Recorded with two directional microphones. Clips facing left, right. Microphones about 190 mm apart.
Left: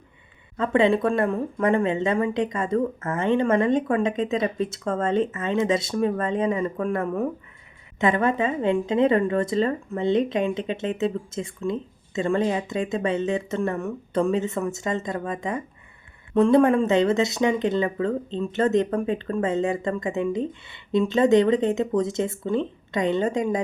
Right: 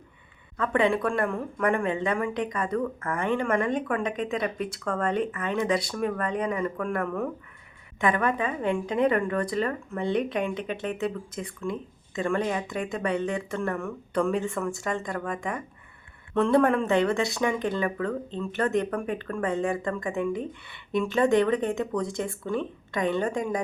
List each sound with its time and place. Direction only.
0.5 s speech: 25° left (ahead or behind)